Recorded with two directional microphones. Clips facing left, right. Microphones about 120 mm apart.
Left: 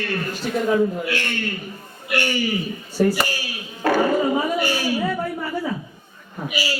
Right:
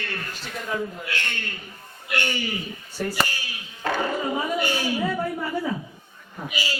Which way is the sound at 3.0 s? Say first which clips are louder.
Left 10 dB; 25° left (ahead or behind).